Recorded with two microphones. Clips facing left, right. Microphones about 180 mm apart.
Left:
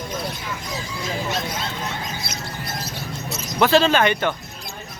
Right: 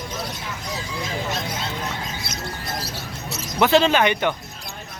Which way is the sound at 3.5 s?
20° right (ahead or behind).